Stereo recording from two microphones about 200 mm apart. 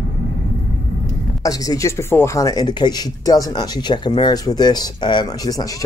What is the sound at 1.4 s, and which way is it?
Speech, 15° left (ahead or behind).